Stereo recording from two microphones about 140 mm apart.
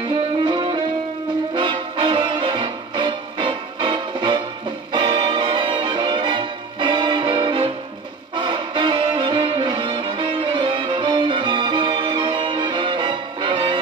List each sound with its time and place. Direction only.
0.1 s music: 35° right (ahead or behind)